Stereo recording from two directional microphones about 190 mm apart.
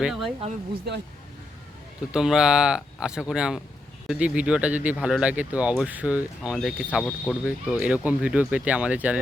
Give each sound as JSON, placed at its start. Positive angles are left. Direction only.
{"t": 0.0, "sound": "speech", "side_deg": 0}
{"t": 0.9, "sound": "speech", "side_deg": -60}
{"t": 2.1, "sound": "speech", "side_deg": -5}